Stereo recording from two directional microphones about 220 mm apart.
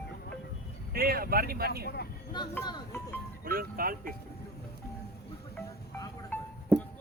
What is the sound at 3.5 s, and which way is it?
Speech, 40° right (ahead or behind).